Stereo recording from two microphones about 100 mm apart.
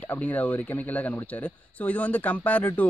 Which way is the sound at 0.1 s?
15° left (ahead or behind).